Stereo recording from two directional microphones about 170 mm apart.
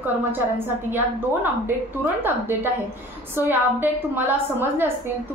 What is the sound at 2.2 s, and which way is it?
A woman's voice, 10° right (ahead or behind).